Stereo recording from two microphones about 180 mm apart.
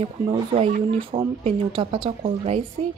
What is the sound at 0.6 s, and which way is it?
A woman's voice, 40° right (ahead or behind).